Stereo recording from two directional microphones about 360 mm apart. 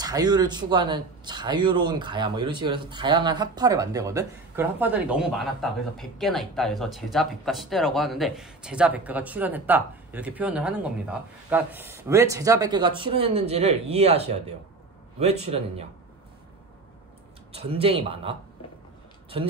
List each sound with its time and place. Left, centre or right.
0.0 s speech: centre
17.5 s speech: centre